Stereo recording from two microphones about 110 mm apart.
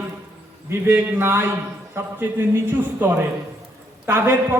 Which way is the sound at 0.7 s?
25° right (ahead or behind).